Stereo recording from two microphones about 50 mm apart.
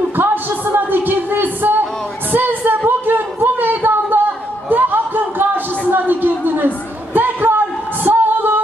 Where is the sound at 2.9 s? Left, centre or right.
Right.